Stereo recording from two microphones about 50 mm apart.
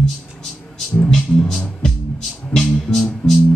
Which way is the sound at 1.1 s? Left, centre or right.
Centre.